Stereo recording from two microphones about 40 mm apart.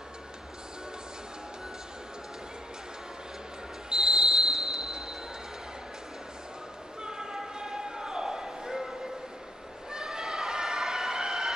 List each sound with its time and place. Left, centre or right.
3.9 s train wheels squealing: centre
7.0 s basketball bounce: centre
9.8 s a sound: centre